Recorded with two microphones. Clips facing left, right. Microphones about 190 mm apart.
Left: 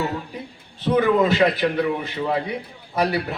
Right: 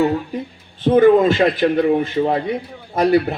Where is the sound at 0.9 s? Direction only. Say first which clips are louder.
Right 6 dB; 50° right (ahead or behind).